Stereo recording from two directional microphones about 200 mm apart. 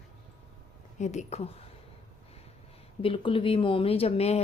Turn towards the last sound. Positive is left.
turn(degrees=30)  # may be behind; listen again after turning